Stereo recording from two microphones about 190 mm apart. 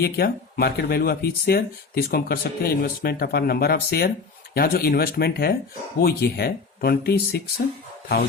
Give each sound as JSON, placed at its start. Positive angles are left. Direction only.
{"t": 0.0, "sound": "speech", "side_deg": 55}